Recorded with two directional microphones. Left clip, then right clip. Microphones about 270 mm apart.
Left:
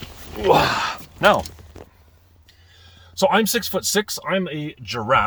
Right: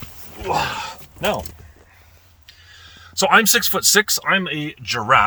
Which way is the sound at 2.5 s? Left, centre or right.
Centre.